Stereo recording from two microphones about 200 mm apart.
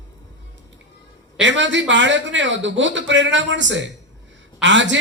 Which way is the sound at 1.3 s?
65° right (ahead or behind).